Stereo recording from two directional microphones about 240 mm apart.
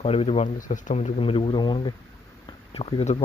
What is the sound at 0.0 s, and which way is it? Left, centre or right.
Speech, left.